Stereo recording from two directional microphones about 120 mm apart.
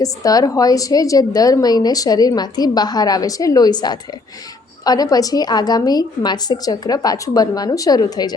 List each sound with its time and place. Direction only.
0.0 s a woman's voice: 30° left (ahead or behind)